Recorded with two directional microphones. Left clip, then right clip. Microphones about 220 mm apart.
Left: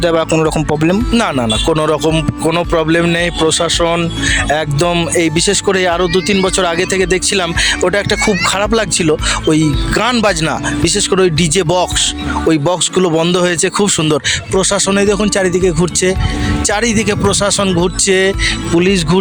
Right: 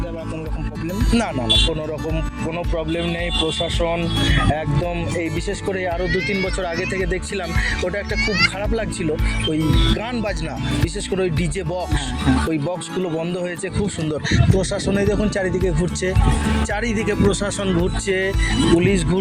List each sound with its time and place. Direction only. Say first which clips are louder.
0.0 s speech: left 17 dB; 50° left (ahead or behind)
0.9 s speech: left 5 dB; 40° left (ahead or behind)
1.7 s speech: left 13 dB; 50° left (ahead or behind)